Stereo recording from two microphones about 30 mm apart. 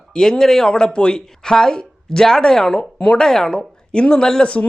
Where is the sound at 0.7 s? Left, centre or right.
Left.